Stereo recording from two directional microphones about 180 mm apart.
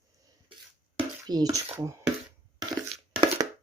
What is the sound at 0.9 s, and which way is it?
Speech, 20° right (ahead or behind).